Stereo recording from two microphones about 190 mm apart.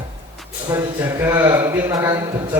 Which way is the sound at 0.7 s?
15° right (ahead or behind).